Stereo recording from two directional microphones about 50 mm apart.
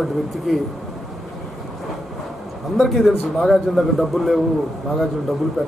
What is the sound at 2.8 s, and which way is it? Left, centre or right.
A man's voice, centre.